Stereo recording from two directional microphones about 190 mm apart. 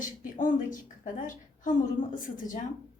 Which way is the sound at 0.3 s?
45° left (ahead or behind).